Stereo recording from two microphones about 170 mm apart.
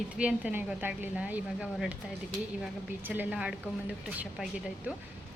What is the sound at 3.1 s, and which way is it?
Speech, 10° right (ahead or behind).